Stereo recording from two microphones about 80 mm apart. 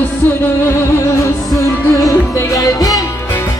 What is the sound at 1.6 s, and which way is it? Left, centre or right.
Music, left.